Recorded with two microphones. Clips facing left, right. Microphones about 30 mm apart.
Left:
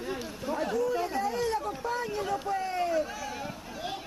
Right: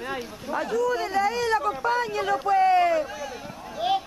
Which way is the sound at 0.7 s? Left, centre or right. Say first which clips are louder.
Right 7 dB; right.